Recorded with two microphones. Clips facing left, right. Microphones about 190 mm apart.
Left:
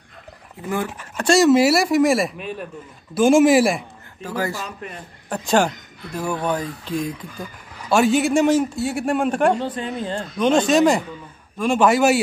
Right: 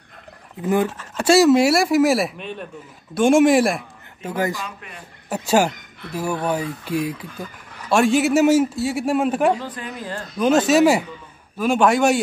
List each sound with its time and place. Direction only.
1.1 s a man's voice: 5° right (ahead or behind)
4.2 s a man's voice: 20° right (ahead or behind)
4.6 s speech: 40° left (ahead or behind)
5.3 s a man's voice: 10° right (ahead or behind)
9.6 s speech: 25° left (ahead or behind)
10.3 s a man's voice: 5° right (ahead or behind)